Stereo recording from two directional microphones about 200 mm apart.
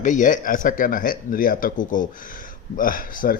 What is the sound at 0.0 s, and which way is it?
Speech, 40° left (ahead or behind).